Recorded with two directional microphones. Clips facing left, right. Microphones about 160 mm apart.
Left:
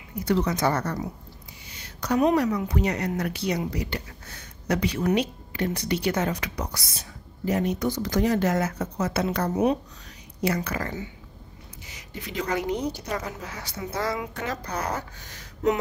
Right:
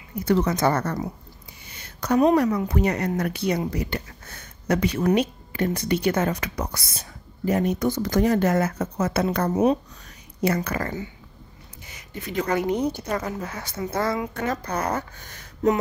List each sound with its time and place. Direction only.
0.2 s a woman's voice: 50° right (ahead or behind)
1.7 s a sound: 50° right (ahead or behind)
2.3 s a woman's voice: 50° right (ahead or behind)